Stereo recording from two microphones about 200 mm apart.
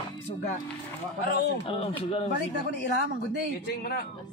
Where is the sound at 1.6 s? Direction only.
30° left (ahead or behind).